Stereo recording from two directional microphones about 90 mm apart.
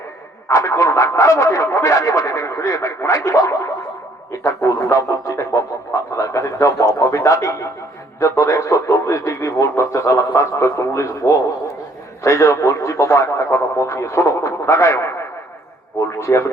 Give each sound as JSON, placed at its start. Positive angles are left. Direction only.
{"t": 0.4, "sound": "speech", "side_deg": 35}